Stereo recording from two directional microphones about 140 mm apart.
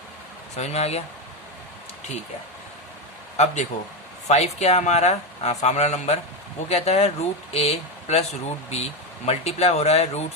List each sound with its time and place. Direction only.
0.5 s speech: 50° left (ahead or behind)
3.3 s speech: 55° left (ahead or behind)